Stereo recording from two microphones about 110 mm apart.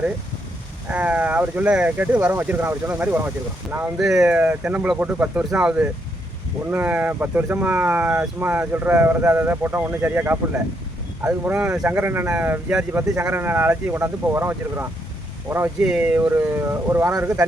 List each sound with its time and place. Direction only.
0.9 s speech: 10° right (ahead or behind)
3.9 s speech: 5° right (ahead or behind); by 11.5 s 25° right (ahead or behind)
11.5 s speech: 10° right (ahead or behind)
15.8 s speech: 10° right (ahead or behind)